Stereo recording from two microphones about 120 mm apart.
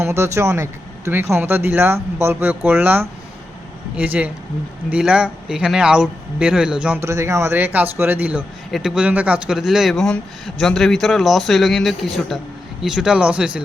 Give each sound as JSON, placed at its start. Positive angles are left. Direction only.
{"t": 0.0, "sound": "speech", "side_deg": -20}
{"t": 7.0, "sound": "speech", "side_deg": -25}